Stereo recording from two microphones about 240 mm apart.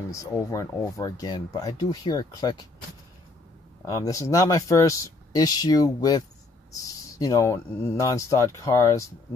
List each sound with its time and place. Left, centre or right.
0.1 s speech: centre
3.8 s speech: centre